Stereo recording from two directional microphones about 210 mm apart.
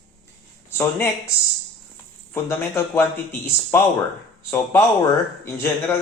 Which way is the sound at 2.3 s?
10° left (ahead or behind).